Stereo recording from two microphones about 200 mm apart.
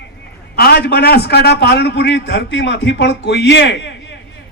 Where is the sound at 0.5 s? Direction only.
50° left (ahead or behind).